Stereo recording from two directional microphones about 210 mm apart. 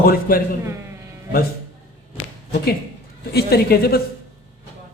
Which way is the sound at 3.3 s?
50° left (ahead or behind).